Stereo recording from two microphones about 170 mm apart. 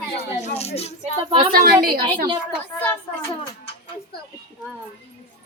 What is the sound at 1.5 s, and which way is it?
Speech, 60° right (ahead or behind).